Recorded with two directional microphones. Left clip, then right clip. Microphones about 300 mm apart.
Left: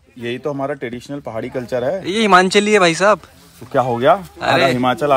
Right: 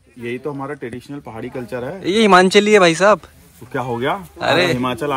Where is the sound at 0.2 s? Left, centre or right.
Centre.